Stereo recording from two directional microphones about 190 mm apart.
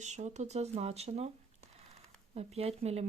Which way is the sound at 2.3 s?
35° right (ahead or behind).